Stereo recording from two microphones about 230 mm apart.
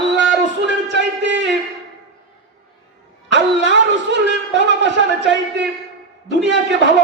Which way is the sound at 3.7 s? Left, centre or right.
Right.